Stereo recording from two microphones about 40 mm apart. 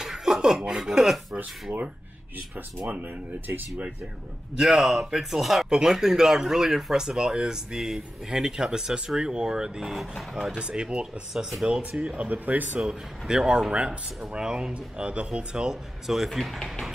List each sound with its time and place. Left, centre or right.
0.0 s chuckle: centre
1.3 s speech: right
4.6 s speech: centre
9.9 s speech: centre
10.6 s speech: right
13.3 s speech: centre
15.5 s speech: centre
16.3 s speech: centre